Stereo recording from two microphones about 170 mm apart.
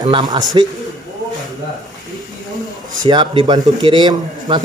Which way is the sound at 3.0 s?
25° right (ahead or behind).